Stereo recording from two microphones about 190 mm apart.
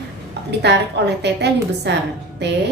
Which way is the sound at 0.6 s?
60° right (ahead or behind).